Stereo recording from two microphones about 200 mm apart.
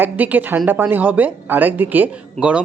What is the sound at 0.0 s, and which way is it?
Speech, 10° right (ahead or behind).